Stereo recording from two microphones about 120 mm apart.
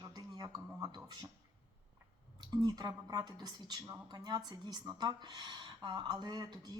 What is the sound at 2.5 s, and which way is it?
Speech, 35° right (ahead or behind).